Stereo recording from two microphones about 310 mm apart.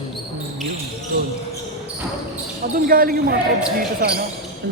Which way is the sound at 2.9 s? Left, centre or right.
Right.